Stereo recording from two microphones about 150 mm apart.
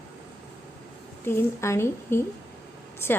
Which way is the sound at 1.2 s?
15° left (ahead or behind).